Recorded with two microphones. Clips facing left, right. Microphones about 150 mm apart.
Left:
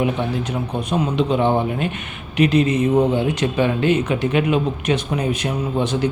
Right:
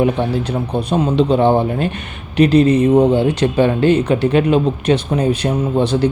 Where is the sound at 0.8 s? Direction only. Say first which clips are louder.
Right 5 dB; 30° right (ahead or behind).